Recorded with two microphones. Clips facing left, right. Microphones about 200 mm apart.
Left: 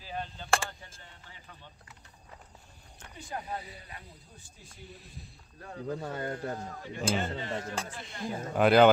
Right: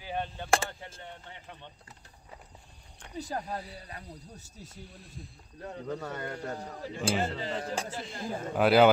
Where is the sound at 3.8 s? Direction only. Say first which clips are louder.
Right 5 dB; 40° right (ahead or behind).